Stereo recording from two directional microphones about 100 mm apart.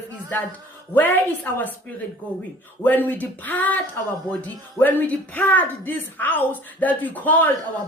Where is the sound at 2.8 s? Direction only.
20° left (ahead or behind).